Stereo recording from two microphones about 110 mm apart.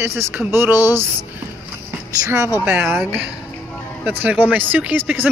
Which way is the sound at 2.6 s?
20° right (ahead or behind).